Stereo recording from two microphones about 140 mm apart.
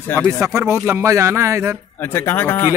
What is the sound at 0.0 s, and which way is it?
Speech, 15° left (ahead or behind).